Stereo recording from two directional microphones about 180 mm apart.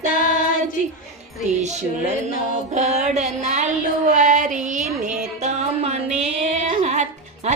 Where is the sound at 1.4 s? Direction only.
40° right (ahead or behind).